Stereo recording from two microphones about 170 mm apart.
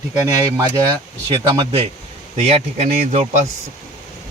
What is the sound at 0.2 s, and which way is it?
Speech, 25° right (ahead or behind).